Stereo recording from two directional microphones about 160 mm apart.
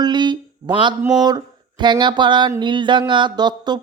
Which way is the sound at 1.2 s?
25° right (ahead or behind).